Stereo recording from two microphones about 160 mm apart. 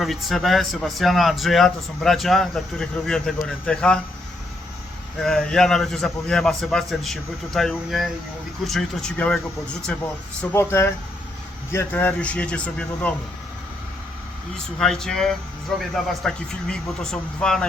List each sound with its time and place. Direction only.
0.0 s a man's voice: centre (ahead or behind)
5.2 s a man's voice: 5° left (ahead or behind)
14.5 s a man's voice: 5° left (ahead or behind)